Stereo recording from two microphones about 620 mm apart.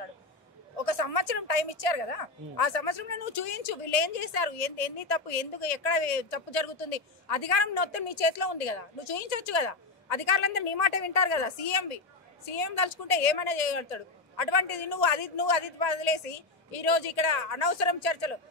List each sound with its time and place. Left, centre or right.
0.7 s a woman's voice: left